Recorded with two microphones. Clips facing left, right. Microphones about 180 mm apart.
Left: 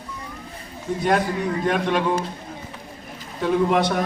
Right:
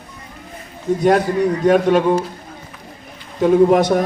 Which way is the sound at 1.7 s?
45° right (ahead or behind).